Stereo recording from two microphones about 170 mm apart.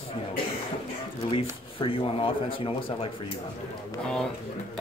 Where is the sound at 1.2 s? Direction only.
30° left (ahead or behind).